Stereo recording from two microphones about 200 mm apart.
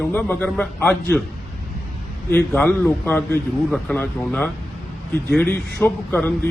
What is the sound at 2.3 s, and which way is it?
A man's voice, 10° left (ahead or behind).